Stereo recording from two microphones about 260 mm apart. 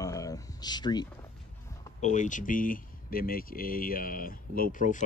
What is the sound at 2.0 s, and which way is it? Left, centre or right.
Speech, left.